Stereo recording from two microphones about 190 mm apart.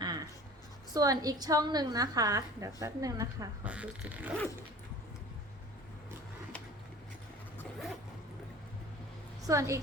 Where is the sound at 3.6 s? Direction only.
5° right (ahead or behind).